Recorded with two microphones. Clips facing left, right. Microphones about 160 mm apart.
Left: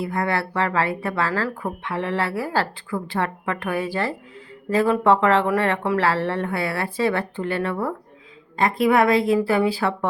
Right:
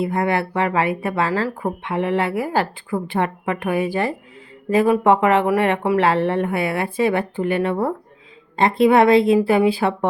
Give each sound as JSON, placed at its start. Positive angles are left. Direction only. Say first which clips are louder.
{"t": 0.0, "sound": "a woman's voice", "louder": "right 4 dB", "side_deg": -20}